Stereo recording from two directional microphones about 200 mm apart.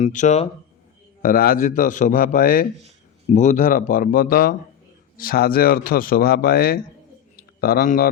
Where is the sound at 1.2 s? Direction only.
45° left (ahead or behind).